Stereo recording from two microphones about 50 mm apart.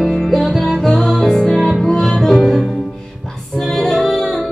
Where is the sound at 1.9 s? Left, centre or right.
Centre.